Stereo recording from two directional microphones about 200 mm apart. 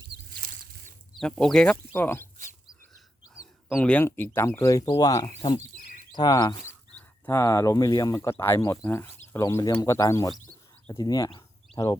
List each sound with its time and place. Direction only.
0.3 s a sound: 45° right (ahead or behind)
1.1 s speech: centre (ahead or behind)
3.8 s speech: 10° left (ahead or behind)